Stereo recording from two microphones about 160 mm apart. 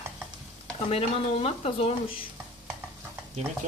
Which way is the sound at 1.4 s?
40° left (ahead or behind).